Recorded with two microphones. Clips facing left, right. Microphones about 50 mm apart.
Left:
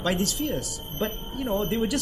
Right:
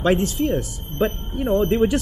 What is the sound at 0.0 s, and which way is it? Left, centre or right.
Speech, right.